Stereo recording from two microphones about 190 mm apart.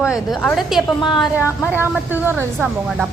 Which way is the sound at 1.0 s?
25° left (ahead or behind).